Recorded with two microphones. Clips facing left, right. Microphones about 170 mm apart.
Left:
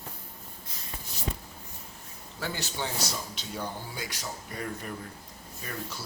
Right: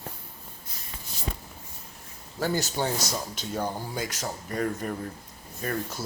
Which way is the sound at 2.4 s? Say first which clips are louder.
Right 7 dB; 40° right (ahead or behind).